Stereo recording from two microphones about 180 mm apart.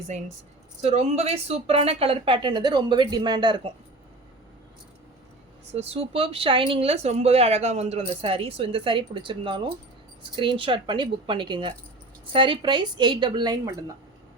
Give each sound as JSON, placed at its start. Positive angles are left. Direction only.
{"t": 0.8, "sound": "speech", "side_deg": -35}
{"t": 5.7, "sound": "a woman's voice", "side_deg": -35}